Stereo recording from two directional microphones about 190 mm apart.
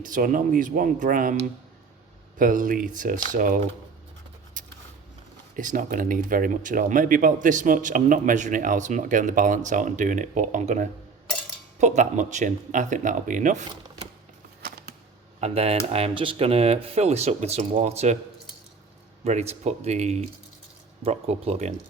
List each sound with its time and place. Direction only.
0.0 s speech: 45° right (ahead or behind)
2.4 s speech: 45° right (ahead or behind)
4.6 s a sound: 45° right (ahead or behind)
5.5 s speech: 45° right (ahead or behind)
15.4 s speech: 35° right (ahead or behind)
19.2 s speech: 35° right (ahead or behind)